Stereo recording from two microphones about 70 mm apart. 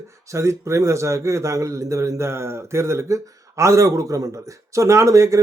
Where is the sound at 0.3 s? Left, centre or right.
Right.